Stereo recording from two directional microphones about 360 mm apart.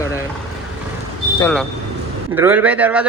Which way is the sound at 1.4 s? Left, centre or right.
Centre.